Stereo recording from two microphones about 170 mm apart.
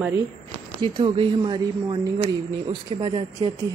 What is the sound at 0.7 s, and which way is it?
A woman's voice, 30° right (ahead or behind).